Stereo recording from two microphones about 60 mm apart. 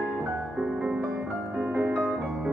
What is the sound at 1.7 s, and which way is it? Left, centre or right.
Music, right.